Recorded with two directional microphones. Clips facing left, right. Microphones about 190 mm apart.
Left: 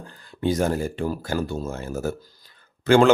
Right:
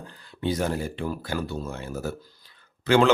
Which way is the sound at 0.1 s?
45° left (ahead or behind).